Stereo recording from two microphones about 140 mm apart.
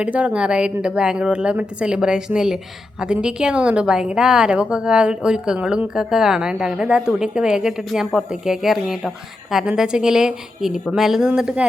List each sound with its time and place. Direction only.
0.0 s a woman's voice: 10° right (ahead or behind)